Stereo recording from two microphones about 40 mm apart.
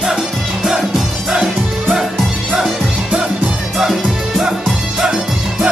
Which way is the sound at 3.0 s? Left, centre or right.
Right.